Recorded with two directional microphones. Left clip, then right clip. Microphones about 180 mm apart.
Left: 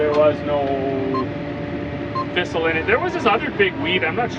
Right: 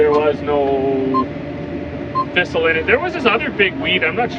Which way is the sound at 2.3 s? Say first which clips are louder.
Right 4 dB; 10° left (ahead or behind).